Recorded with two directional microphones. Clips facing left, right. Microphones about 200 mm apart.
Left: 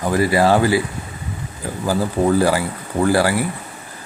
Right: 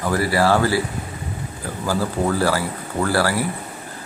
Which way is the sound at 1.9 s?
15° left (ahead or behind).